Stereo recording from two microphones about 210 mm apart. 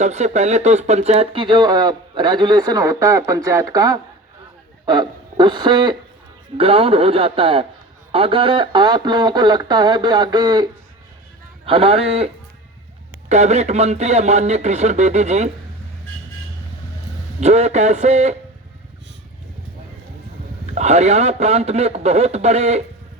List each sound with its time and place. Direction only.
0.0 s speech: 30° right (ahead or behind)
17.4 s speech: 30° right (ahead or behind)
20.7 s speech: 30° right (ahead or behind)